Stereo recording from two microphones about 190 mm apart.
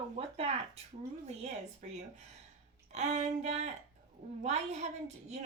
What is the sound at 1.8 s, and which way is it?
A woman's voice, 40° right (ahead or behind).